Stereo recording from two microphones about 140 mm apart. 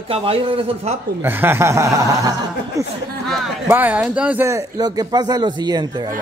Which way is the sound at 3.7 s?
10° right (ahead or behind).